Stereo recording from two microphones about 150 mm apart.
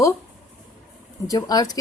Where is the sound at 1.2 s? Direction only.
25° left (ahead or behind).